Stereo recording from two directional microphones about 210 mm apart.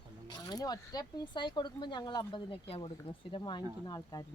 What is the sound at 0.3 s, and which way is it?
A woman's voice, 20° left (ahead or behind).